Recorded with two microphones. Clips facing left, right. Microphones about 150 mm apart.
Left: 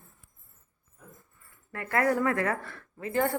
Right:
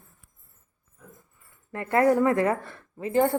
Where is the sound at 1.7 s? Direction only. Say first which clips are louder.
Right 6 dB; 25° right (ahead or behind).